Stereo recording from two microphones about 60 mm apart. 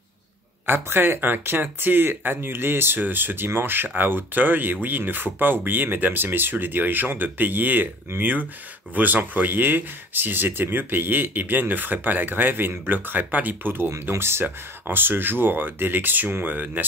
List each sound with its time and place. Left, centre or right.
0.7 s speech: right